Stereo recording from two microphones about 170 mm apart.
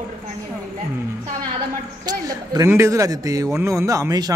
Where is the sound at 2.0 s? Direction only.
20° right (ahead or behind).